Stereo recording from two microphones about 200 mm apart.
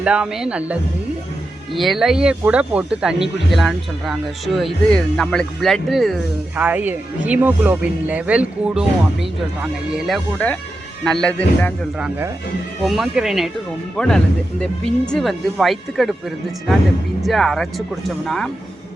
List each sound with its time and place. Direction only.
0.0 s speech: 5° right (ahead or behind)
10.1 s speech: 5° left (ahead or behind)
11.9 s speech: 5° right (ahead or behind)
17.2 s speech: centre (ahead or behind)